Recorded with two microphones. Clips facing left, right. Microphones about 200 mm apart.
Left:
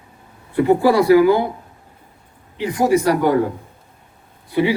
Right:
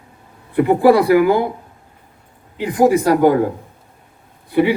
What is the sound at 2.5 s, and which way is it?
Speech, 55° right (ahead or behind).